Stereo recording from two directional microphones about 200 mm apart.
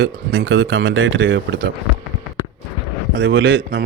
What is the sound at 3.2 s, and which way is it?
Speech, 65° right (ahead or behind).